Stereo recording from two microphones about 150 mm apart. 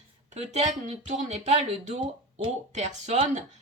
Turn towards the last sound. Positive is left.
turn(degrees=-50)  # may be behind; listen again after turning